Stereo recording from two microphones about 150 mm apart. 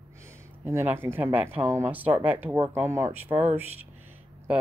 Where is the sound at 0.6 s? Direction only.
15° right (ahead or behind).